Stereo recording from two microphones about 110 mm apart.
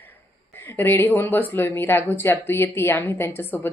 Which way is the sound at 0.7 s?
20° left (ahead or behind).